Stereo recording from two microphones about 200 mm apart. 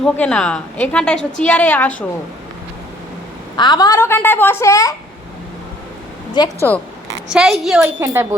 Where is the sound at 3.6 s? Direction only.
20° left (ahead or behind).